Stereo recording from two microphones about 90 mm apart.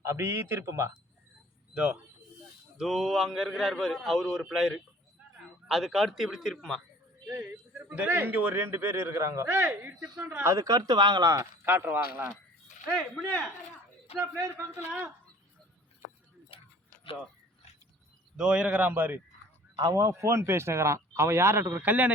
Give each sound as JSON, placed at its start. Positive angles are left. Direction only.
{"t": 0.0, "sound": "speech", "side_deg": -30}
{"t": 1.7, "sound": "a man's voice", "side_deg": -10}
{"t": 7.4, "sound": "a sound", "side_deg": -15}
{"t": 8.0, "sound": "speech", "side_deg": -25}
{"t": 9.5, "sound": "speech", "side_deg": -20}
{"t": 10.4, "sound": "speech", "side_deg": -35}
{"t": 11.3, "sound": "speech", "side_deg": -20}
{"t": 13.1, "sound": "speech", "side_deg": 20}
{"t": 14.2, "sound": "a man's voice", "side_deg": -35}
{"t": 16.5, "sound": "a sound", "side_deg": 90}
{"t": 18.3, "sound": "a man's voice", "side_deg": -10}
{"t": 19.9, "sound": "speech", "side_deg": -35}